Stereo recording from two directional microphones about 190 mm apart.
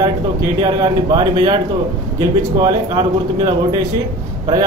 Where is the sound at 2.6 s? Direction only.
25° right (ahead or behind).